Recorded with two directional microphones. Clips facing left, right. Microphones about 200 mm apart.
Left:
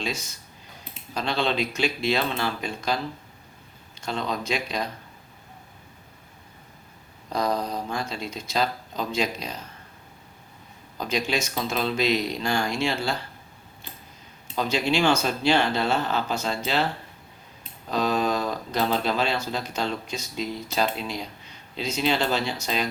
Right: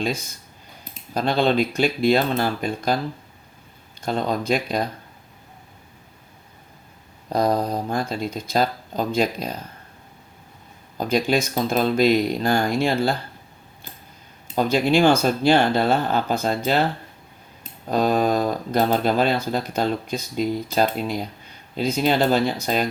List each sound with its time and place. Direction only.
0.0 s speech: 55° right (ahead or behind)
4.0 s speech: 50° right (ahead or behind)
7.3 s speech: 50° right (ahead or behind)
10.9 s speech: 50° right (ahead or behind)
14.5 s speech: 55° right (ahead or behind)
17.6 s speech: 45° right (ahead or behind)